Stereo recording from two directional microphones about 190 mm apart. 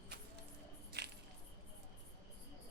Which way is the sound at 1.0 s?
60° right (ahead or behind).